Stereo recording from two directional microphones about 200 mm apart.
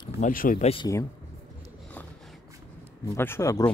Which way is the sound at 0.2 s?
45° left (ahead or behind).